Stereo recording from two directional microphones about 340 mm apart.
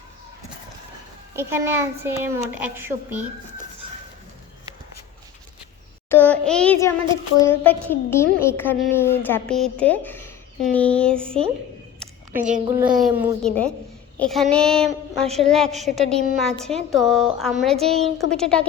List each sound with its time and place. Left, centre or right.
1.4 s a child's voice: centre
6.1 s a woman's voice: centre
12.0 s a sound: centre
12.4 s a woman's voice: right
13.4 s a woman's voice: centre
14.2 s child singing: centre
14.5 s a woman's voice: centre
17.8 s a child's voice: centre
18.3 s a woman's voice: centre